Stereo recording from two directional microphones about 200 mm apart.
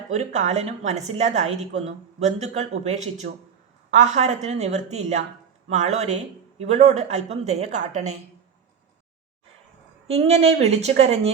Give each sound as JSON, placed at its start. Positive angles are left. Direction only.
{"t": 0.1, "sound": "a woman's voice", "side_deg": -35}
{"t": 3.3, "sound": "speech", "side_deg": -45}
{"t": 3.9, "sound": "a woman's voice", "side_deg": -35}
{"t": 10.1, "sound": "a woman's voice", "side_deg": -30}